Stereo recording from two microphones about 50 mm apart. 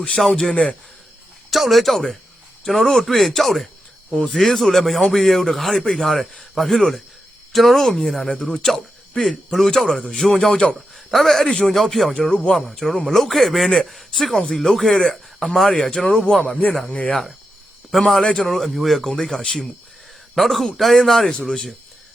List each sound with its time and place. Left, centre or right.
0.3 s speech: centre
1.5 s speech: centre
10.5 s speech: centre
10.8 s speech: centre; by 16.8 s left
17.9 s speech: centre
20.3 s speech: centre